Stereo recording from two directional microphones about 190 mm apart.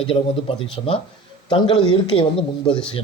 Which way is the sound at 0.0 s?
30° left (ahead or behind).